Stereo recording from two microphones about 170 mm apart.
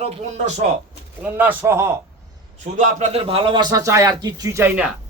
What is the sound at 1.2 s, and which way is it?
Speech, 10° right (ahead or behind).